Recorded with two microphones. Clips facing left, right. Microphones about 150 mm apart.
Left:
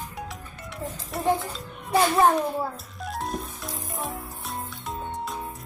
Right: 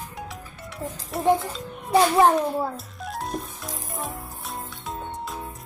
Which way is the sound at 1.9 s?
20° right (ahead or behind).